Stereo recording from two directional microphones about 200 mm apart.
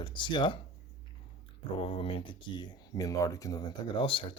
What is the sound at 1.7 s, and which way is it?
Speech, 25° left (ahead or behind).